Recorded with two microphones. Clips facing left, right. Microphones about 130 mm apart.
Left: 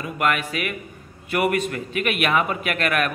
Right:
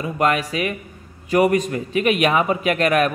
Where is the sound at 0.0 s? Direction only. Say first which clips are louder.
Right 4 dB; 35° right (ahead or behind).